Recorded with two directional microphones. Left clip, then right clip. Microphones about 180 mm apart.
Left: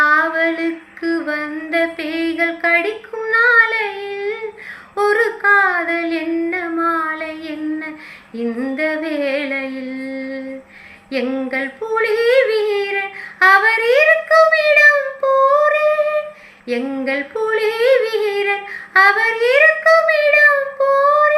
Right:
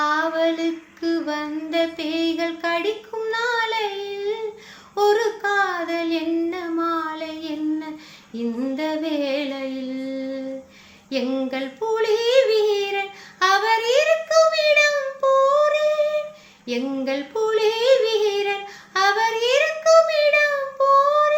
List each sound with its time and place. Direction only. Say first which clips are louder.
0.0 s female singing: left 6 dB; 25° right (ahead or behind)
1.2 s a sound: left 4 dB; 25° right (ahead or behind)
3.3 s child singing: left 11 dB; 25° right (ahead or behind)
8.7 s music: left 5 dB; 25° right (ahead or behind)
11.1 s yodeling: left 4 dB; 25° right (ahead or behind)
16.6 s a sound: left 4 dB; 25° right (ahead or behind)
18.9 s child singing: left 7 dB; 25° right (ahead or behind)